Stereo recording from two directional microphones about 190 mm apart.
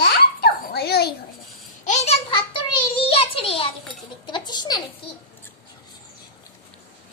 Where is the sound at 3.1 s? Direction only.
30° left (ahead or behind).